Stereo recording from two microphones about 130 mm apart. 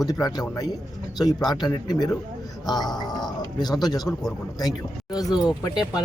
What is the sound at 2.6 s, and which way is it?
Speech, 30° left (ahead or behind).